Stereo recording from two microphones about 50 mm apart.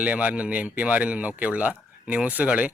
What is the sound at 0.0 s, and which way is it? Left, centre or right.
Speech, right.